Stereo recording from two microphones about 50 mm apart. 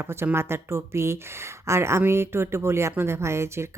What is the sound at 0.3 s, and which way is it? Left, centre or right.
Speech, right.